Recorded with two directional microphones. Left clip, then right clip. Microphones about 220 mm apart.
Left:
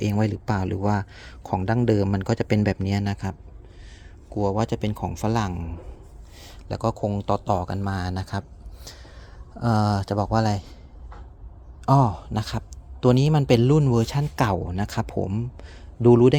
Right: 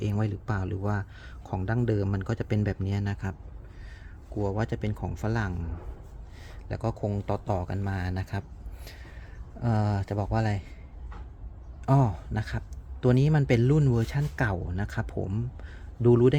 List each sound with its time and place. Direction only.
0.0 s speech: 30° left (ahead or behind)
4.4 s speech: 25° left (ahead or behind)
11.9 s speech: 20° left (ahead or behind)